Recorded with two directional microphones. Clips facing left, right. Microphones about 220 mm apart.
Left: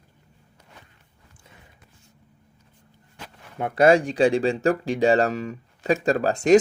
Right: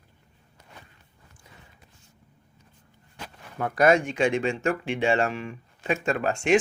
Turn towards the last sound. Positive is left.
turn(degrees=40)  # may be behind; listen again after turning